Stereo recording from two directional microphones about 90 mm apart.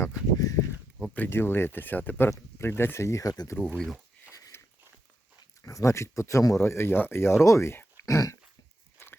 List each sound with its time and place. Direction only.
0.1 s speech: 40° left (ahead or behind)
1.1 s speech: 25° left (ahead or behind); by 3.5 s 40° left (ahead or behind)
3.8 s speech: centre (ahead or behind)
4.5 s biting: 25° left (ahead or behind)
5.6 s speech: 35° left (ahead or behind)